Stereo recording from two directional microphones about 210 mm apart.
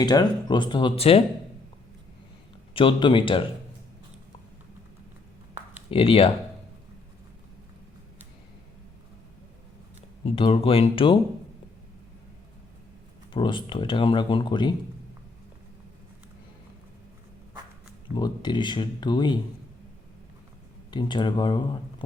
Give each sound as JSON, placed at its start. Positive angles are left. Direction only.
{"t": 0.0, "sound": "speech", "side_deg": 20}
{"t": 2.7, "sound": "speech", "side_deg": 25}
{"t": 5.9, "sound": "speech", "side_deg": 25}
{"t": 10.2, "sound": "speech", "side_deg": 25}
{"t": 13.3, "sound": "speech", "side_deg": 25}
{"t": 18.1, "sound": "speech", "side_deg": 20}
{"t": 20.9, "sound": "speech", "side_deg": 20}